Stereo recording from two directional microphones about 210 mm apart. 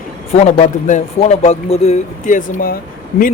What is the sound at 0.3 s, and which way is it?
Speech, 35° left (ahead or behind).